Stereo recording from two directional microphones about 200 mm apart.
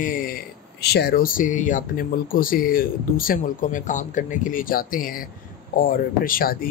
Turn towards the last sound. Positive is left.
turn(degrees=45)  # may be behind; listen again after turning